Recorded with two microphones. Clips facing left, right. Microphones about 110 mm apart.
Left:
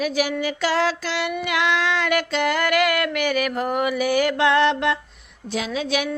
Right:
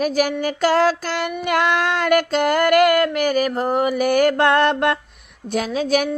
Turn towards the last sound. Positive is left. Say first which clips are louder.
# right 5 dB
turn(degrees=-45)  # may be behind; listen again after turning